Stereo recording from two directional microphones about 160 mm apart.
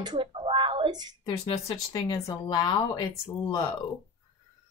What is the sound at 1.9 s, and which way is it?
Speech, 25° left (ahead or behind).